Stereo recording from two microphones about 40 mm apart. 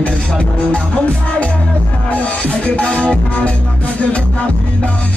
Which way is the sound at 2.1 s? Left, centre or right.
Left.